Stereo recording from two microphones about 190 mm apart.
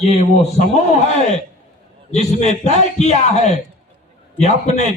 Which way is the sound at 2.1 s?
35° left (ahead or behind).